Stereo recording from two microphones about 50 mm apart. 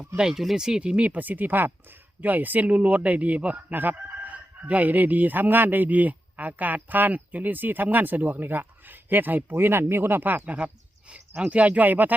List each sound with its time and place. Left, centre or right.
0.2 s speech: centre; by 12.1 s right